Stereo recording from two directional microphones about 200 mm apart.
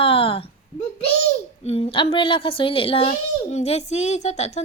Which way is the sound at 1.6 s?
30° left (ahead or behind).